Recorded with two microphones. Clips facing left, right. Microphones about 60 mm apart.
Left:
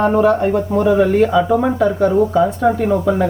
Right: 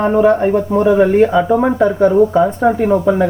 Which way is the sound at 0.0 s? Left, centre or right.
Centre.